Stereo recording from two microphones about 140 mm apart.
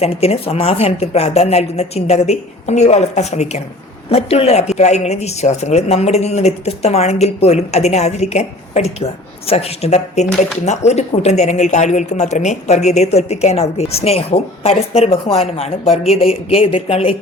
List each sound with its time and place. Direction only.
0.0 s a woman's voice: 45° left (ahead or behind)